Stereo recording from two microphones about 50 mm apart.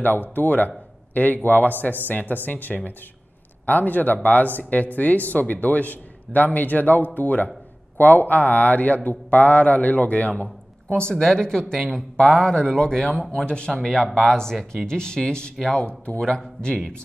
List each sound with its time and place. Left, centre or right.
0.0 s a man's voice: left; by 17.0 s centre